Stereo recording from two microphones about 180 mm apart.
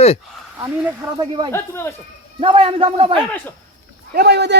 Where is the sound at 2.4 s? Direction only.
30° right (ahead or behind).